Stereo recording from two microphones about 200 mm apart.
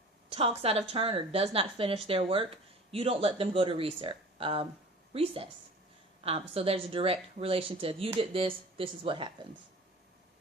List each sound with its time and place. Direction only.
0.3 s a woman's voice: 30° right (ahead or behind)
6.5 s a woman's voice: 30° right (ahead or behind)